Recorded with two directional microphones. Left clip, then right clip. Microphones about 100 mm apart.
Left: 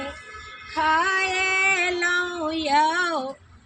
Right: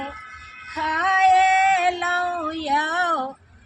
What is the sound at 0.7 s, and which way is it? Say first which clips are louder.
Female singing: even; 15° right (ahead or behind).